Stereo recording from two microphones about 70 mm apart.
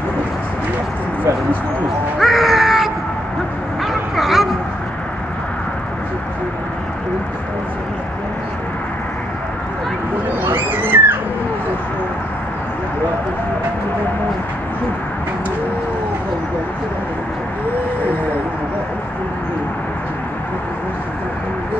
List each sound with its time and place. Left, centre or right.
2.1 s crow: centre
3.8 s vehicle: centre
10.4 s a sound: right